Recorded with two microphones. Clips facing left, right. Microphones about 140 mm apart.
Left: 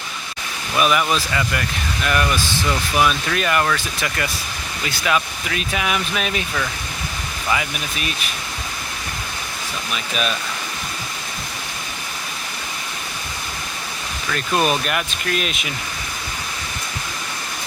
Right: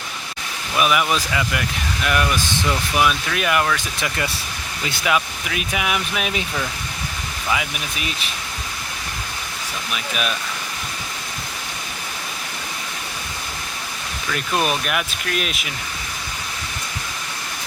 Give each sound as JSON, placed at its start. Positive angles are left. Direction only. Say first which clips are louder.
{"t": 0.8, "sound": "speech", "louder": "left 1 dB", "side_deg": -5}
{"t": 4.9, "sound": "speech", "louder": "even", "side_deg": -20}
{"t": 9.9, "sound": "speech", "louder": "left 1 dB", "side_deg": -5}
{"t": 14.5, "sound": "speech", "louder": "left 2 dB", "side_deg": 0}